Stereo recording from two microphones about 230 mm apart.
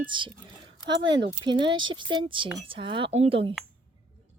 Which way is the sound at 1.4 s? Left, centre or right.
Centre.